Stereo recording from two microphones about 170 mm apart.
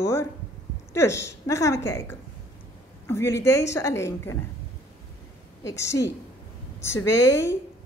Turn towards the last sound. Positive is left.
turn(degrees=20)  # may be behind; listen again after turning